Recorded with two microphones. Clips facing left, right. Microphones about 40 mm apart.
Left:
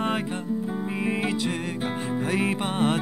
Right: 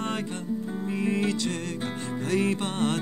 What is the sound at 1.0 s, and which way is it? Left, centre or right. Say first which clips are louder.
Music: even; centre.